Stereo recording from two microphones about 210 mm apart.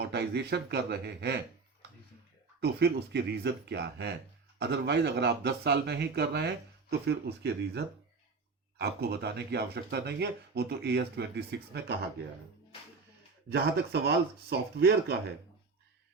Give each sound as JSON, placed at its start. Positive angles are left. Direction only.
{"t": 0.0, "sound": "speech", "side_deg": -50}
{"t": 2.6, "sound": "speech", "side_deg": -50}
{"t": 13.5, "sound": "speech", "side_deg": -50}